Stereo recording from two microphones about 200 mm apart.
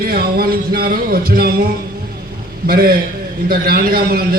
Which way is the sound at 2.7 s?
50° right (ahead or behind).